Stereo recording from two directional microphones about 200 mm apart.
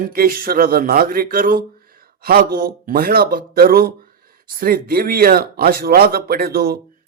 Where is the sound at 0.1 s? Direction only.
45° right (ahead or behind).